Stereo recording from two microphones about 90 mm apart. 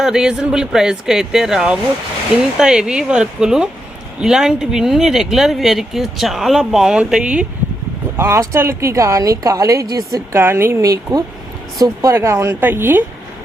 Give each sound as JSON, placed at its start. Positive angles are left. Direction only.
{"t": 0.0, "sound": "speech", "side_deg": -5}
{"t": 8.1, "sound": "speech", "side_deg": -25}
{"t": 10.3, "sound": "speech", "side_deg": -25}